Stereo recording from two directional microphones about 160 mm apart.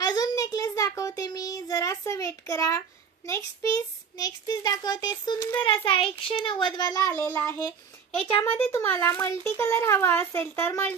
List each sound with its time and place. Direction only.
0.0 s child singing: 25° left (ahead or behind)
3.3 s a child's voice: 15° left (ahead or behind)
7.1 s a child's voice: 10° left (ahead or behind)
8.2 s a child's voice: 35° left (ahead or behind)
8.5 s a child's voice: 15° left (ahead or behind)